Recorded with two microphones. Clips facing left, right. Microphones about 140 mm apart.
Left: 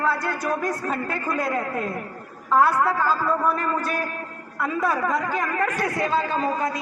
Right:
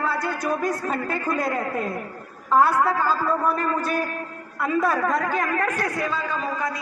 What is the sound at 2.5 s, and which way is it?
A man's voice, centre (ahead or behind).